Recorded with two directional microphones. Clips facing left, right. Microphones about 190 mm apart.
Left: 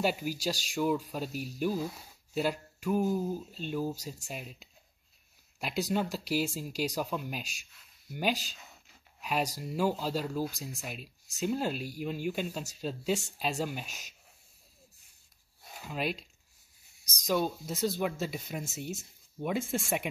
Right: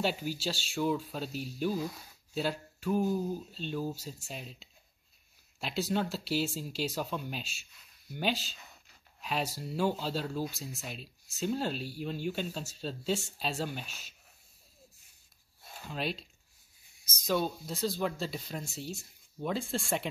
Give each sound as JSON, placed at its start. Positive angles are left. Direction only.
{"t": 0.0, "sound": "speech", "side_deg": 10}
{"t": 13.6, "sound": "speech", "side_deg": 10}
{"t": 15.7, "sound": "speech", "side_deg": 5}